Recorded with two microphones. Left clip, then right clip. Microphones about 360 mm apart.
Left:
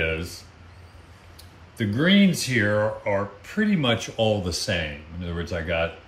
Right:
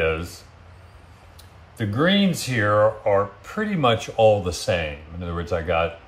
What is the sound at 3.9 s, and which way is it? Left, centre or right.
Speech, centre.